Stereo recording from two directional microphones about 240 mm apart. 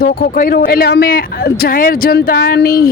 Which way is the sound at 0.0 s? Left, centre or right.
Left.